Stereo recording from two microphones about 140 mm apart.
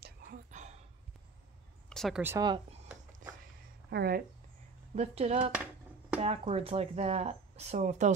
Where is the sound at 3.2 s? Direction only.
70° right (ahead or behind).